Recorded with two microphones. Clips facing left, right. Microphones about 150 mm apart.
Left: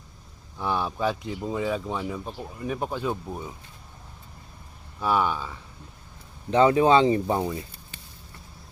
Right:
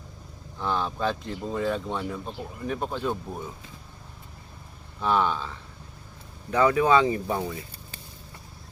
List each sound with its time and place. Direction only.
0.6 s speech: 10° left (ahead or behind)
4.9 s speech: 5° left (ahead or behind)
6.5 s speech: 25° left (ahead or behind)